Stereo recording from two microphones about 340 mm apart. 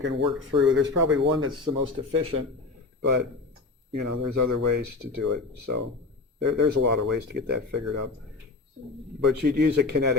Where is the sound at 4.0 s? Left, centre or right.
Right.